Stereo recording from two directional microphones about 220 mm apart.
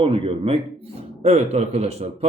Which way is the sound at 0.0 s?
25° right (ahead or behind).